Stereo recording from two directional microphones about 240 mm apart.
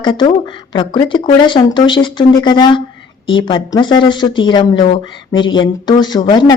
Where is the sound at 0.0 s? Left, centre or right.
Centre.